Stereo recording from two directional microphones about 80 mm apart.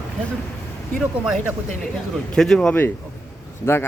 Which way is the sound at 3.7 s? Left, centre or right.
Left.